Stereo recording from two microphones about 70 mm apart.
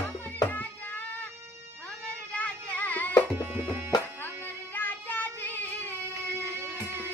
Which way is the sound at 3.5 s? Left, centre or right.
Right.